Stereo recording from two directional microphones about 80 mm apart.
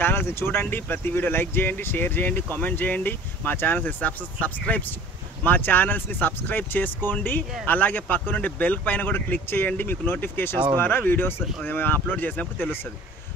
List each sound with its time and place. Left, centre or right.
0.0 s speech: left